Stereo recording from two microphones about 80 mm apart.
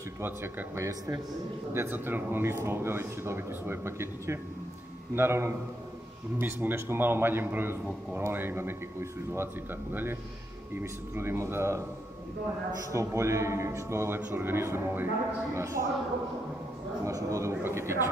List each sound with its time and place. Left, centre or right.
0.2 s a man's voice: right
12.9 s a man's voice: right
17.0 s a man's voice: right